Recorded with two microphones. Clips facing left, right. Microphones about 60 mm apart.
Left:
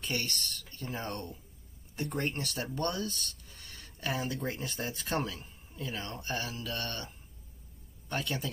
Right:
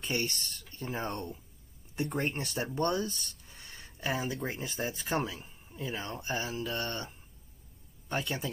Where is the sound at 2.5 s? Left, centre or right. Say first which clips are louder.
Right 2 dB; right.